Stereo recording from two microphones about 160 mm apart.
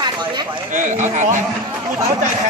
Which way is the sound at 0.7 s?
50° right (ahead or behind).